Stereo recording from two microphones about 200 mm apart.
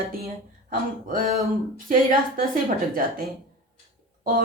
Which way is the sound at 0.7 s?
45° right (ahead or behind).